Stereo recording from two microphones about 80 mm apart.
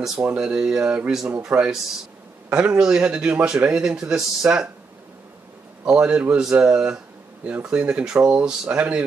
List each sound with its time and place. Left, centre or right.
0.0 s speech: centre
5.9 s speech: centre